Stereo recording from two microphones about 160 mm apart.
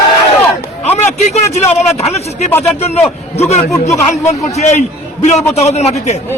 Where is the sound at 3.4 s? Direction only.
45° left (ahead or behind).